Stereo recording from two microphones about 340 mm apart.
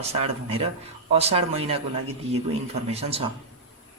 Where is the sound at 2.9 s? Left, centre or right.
Centre.